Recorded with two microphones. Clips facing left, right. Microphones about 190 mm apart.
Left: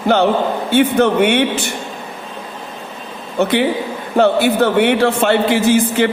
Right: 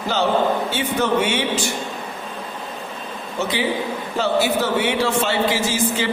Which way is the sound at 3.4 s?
60° left (ahead or behind).